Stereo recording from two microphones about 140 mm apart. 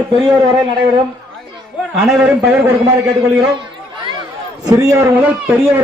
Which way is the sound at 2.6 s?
25° right (ahead or behind).